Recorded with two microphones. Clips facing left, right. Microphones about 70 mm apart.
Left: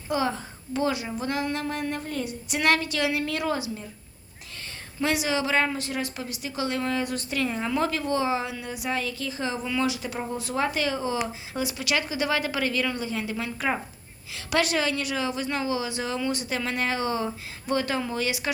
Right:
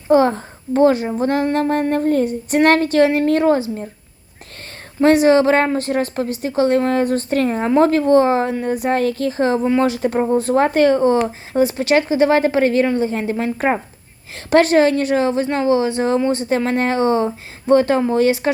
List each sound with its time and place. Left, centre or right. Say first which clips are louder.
0.1 s a woman's voice: right 13 dB; right
4.9 s a woman's voice: right 14 dB; right